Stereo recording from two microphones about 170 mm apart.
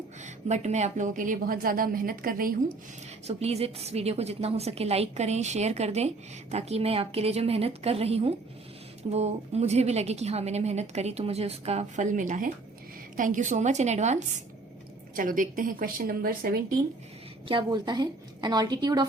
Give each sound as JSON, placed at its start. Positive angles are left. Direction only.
{"t": 0.4, "sound": "a woman's voice", "side_deg": -40}
{"t": 3.2, "sound": "a woman's voice", "side_deg": -40}
{"t": 15.1, "sound": "a woman's voice", "side_deg": -55}
{"t": 17.5, "sound": "a woman's voice", "side_deg": -25}